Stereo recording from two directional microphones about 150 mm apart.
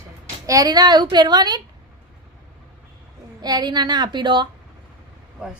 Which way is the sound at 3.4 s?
30° right (ahead or behind).